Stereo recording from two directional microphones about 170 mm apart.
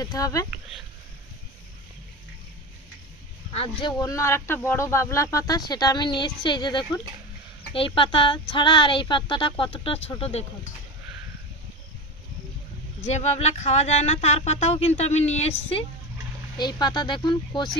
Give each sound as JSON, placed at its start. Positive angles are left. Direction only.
{"t": 0.0, "sound": "speech", "side_deg": 20}
{"t": 4.0, "sound": "speech", "side_deg": 15}
{"t": 13.0, "sound": "speech", "side_deg": 40}
{"t": 16.5, "sound": "speech", "side_deg": 25}